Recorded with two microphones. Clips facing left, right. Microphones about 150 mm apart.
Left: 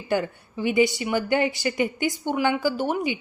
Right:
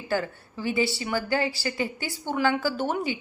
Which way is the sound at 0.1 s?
15° left (ahead or behind).